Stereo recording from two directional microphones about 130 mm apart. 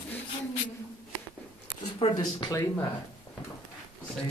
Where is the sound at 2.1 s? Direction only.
30° left (ahead or behind).